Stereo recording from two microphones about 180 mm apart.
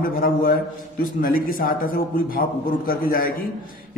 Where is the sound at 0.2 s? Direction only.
50° left (ahead or behind).